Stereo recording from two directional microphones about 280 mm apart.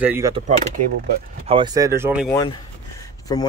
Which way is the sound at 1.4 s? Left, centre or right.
Centre.